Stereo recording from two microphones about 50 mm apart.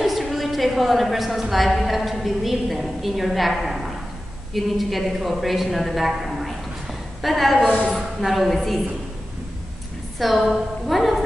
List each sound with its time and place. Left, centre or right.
0.0 s a woman's voice: centre
10.1 s a woman's voice: centre